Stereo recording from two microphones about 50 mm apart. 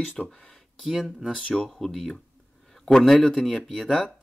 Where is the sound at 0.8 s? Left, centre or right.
Centre.